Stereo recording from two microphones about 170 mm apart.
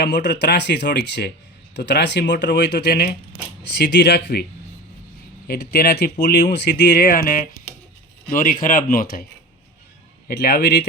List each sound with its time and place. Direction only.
0.0 s speech: 80° left
3.8 s speech: 90° left
5.5 s speech: 70° left (ahead or behind)
10.2 s speech: 65° left (ahead or behind)